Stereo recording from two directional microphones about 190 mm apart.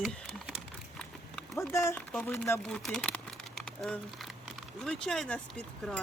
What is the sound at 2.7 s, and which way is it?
Crumpling, 5° left (ahead or behind).